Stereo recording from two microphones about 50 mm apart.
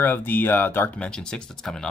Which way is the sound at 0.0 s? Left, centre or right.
Left.